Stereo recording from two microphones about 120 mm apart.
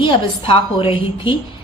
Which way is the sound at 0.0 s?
45° left (ahead or behind).